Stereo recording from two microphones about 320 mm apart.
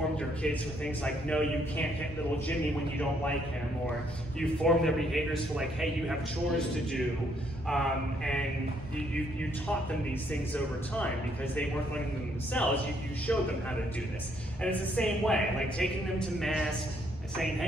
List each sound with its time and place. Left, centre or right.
1.0 s a man's voice: centre
4.4 s a man's voice: centre
7.6 s a man's voice: centre
12.6 s a man's voice: centre
14.6 s a man's voice: centre